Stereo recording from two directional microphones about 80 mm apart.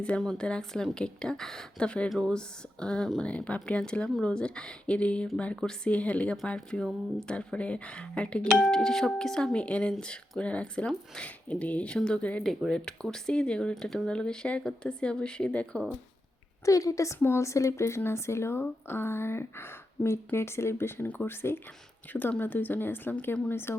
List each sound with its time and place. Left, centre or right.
0.2 s speech: centre
16.6 s a woman's voice: left
21.1 s speech: centre